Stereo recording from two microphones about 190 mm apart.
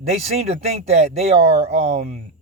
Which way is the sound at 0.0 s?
35° right (ahead or behind).